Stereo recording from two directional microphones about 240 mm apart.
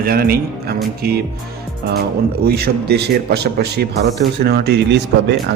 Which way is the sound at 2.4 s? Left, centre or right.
Right.